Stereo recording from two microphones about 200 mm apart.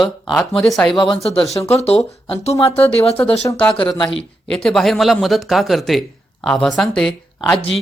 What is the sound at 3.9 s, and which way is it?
Speech, 25° left (ahead or behind).